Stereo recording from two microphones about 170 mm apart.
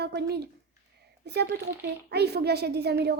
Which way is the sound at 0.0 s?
75° right (ahead or behind).